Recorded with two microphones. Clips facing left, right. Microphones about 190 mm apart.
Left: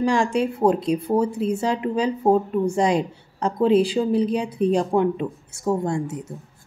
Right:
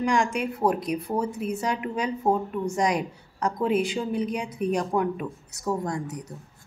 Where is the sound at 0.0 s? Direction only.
30° left (ahead or behind).